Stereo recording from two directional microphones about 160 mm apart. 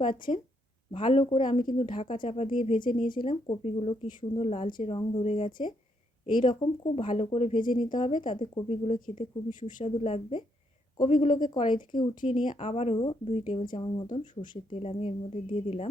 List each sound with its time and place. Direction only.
0.0 s speech: 30° left (ahead or behind)
7.5 s speech: 55° left (ahead or behind)
7.8 s speech: 30° left (ahead or behind)
9.1 s speech: 55° left (ahead or behind)
9.8 s speech: 40° left (ahead or behind)
12.5 s speech: 40° left (ahead or behind)